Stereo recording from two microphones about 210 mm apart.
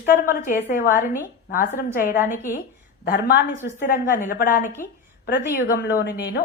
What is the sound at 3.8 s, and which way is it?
Speech, 40° left (ahead or behind).